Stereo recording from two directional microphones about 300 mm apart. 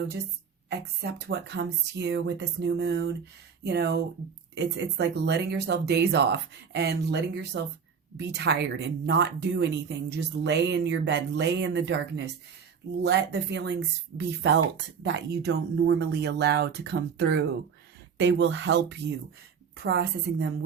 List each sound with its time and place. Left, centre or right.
0.7 s speech: right